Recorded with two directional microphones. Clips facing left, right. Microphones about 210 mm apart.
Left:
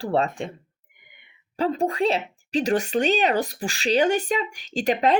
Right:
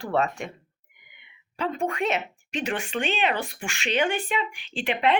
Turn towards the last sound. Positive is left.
turn(degrees=40)  # may be behind; listen again after turning